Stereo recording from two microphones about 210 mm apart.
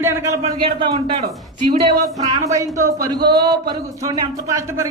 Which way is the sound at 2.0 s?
15° right (ahead or behind).